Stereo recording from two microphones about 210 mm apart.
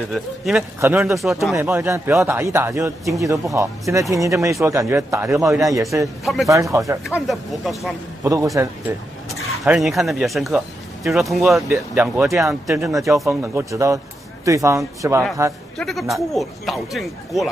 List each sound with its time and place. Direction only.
0.1 s a man's voice: centre (ahead or behind)
6.2 s speech: centre (ahead or behind)
6.5 s a man's voice: 15° right (ahead or behind)
7.2 s speech: centre (ahead or behind)
8.2 s a man's voice: 15° right (ahead or behind)
9.7 s speech: centre (ahead or behind)
11.7 s a man's voice: 10° right (ahead or behind)
15.8 s speech: centre (ahead or behind)